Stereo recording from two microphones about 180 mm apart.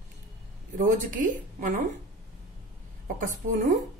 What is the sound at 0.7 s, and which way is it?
A woman's voice, 45° right (ahead or behind).